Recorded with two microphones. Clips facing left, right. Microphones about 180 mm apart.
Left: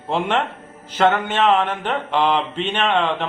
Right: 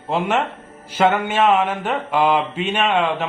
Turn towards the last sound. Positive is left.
turn(degrees=-10)  # may be behind; listen again after turning